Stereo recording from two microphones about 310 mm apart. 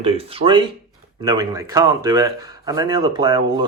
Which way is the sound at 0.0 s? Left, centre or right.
Centre.